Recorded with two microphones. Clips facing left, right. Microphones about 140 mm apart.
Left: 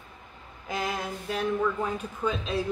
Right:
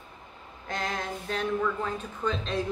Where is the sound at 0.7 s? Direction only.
5° left (ahead or behind).